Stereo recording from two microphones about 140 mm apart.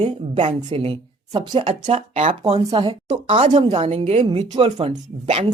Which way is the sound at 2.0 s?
55° right (ahead or behind).